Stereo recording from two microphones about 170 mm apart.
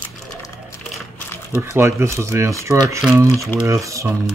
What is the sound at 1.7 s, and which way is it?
Speech, 15° right (ahead or behind).